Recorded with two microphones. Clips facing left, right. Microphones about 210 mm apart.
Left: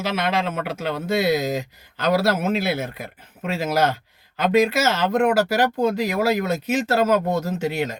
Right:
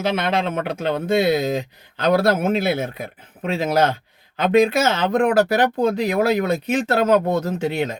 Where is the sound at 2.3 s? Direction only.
55° right (ahead or behind).